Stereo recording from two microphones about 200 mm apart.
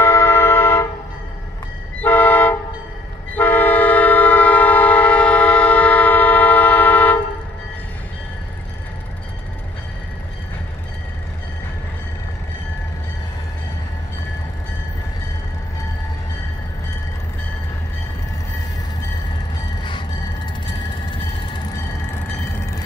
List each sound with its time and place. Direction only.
0.0 s vehicle: 10° left (ahead or behind)
2.0 s vehicle: 10° left (ahead or behind)
3.3 s train: 10° left (ahead or behind)
20.6 s train: 25° left (ahead or behind)